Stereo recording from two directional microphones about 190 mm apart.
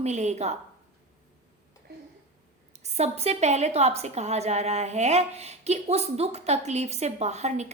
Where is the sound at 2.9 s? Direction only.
35° right (ahead or behind).